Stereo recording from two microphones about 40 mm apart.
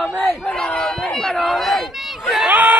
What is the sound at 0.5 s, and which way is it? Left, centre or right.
Crowd, centre.